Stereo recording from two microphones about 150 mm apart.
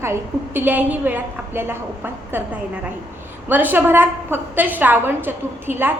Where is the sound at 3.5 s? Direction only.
10° right (ahead or behind).